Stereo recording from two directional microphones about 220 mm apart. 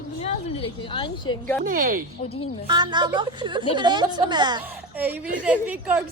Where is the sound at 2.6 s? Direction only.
20° right (ahead or behind).